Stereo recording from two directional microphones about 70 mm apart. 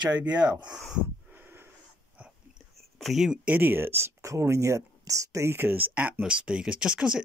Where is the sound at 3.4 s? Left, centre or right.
Right.